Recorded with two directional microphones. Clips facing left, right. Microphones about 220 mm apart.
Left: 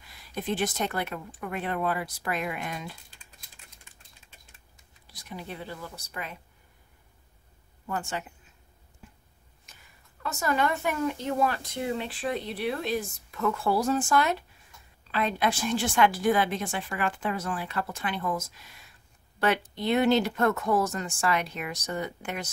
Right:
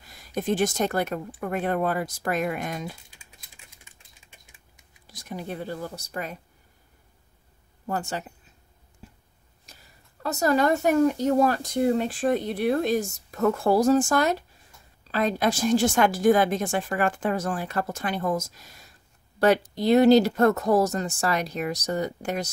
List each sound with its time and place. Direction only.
0.0 s speech: 40° right (ahead or behind)
5.0 s speech: 45° right (ahead or behind)
7.8 s speech: 40° right (ahead or behind)
9.7 s a sound: 40° right (ahead or behind)
10.2 s speech: 40° right (ahead or behind)